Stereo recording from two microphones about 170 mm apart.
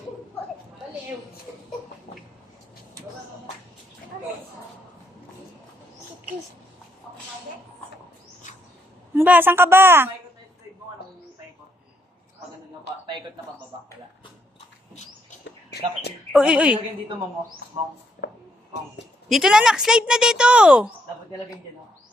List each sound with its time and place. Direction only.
8.4 s dog: 45° left (ahead or behind)
9.1 s a woman's voice: 10° right (ahead or behind)
16.3 s speech: 5° right (ahead or behind)
19.3 s speech: centre (ahead or behind)